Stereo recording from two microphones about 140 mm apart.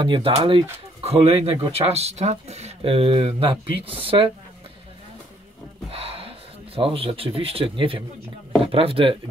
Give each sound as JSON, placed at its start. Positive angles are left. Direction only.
{"t": 0.0, "sound": "speech", "side_deg": -35}
{"t": 5.9, "sound": "speech", "side_deg": -45}